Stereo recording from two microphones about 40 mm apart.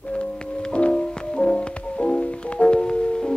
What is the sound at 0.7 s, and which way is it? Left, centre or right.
Music, left.